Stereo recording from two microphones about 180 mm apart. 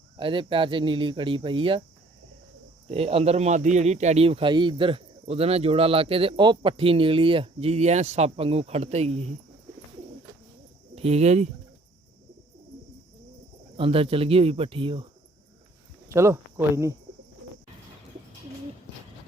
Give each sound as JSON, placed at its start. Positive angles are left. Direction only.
{"t": 0.2, "sound": "speech", "side_deg": -30}
{"t": 2.8, "sound": "a man's voice", "side_deg": -35}
{"t": 10.9, "sound": "speech", "side_deg": -35}
{"t": 13.7, "sound": "a man's voice", "side_deg": -30}
{"t": 16.0, "sound": "speech", "side_deg": -15}